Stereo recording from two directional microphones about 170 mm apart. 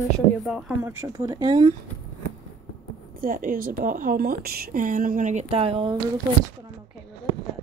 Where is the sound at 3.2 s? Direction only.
55° right (ahead or behind); by 6.0 s 30° right (ahead or behind).